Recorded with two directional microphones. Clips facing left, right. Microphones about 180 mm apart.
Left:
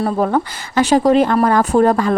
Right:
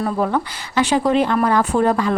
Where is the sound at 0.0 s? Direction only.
40° left (ahead or behind).